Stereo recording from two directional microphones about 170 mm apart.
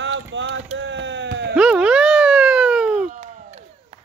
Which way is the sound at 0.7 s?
90° right.